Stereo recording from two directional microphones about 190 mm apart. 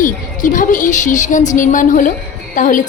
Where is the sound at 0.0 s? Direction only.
45° left (ahead or behind).